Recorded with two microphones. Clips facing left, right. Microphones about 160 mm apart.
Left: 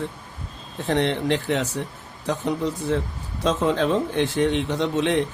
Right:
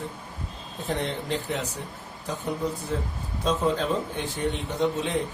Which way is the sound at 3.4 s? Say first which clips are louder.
Left 4 dB; 90° left.